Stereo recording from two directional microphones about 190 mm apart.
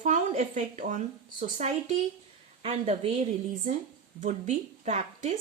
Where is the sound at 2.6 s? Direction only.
35° right (ahead or behind).